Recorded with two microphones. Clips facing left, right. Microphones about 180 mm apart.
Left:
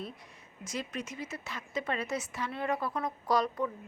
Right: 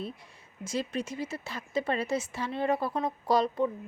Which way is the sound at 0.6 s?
30° right (ahead or behind).